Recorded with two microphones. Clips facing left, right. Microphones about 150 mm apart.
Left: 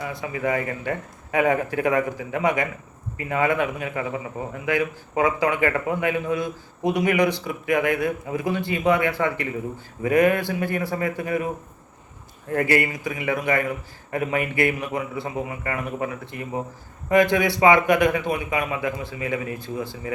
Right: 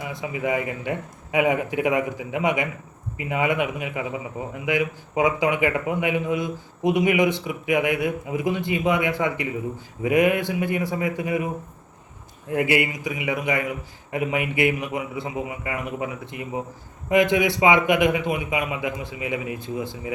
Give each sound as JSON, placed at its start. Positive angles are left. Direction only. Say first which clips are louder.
{"t": 0.0, "sound": "a man's voice", "louder": "left 1 dB", "side_deg": -20}
{"t": 12.5, "sound": "a man's voice", "louder": "even", "side_deg": -15}